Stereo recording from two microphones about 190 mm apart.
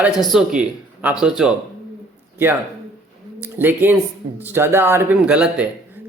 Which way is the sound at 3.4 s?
10° right (ahead or behind).